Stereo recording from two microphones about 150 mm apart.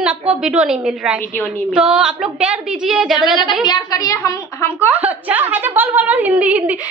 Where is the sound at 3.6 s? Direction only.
25° left (ahead or behind).